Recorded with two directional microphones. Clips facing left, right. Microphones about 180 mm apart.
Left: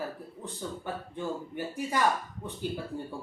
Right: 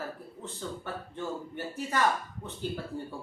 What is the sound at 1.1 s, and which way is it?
Speech, 15° left (ahead or behind).